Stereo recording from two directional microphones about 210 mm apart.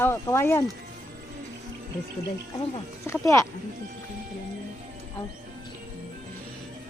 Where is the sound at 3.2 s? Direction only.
15° left (ahead or behind).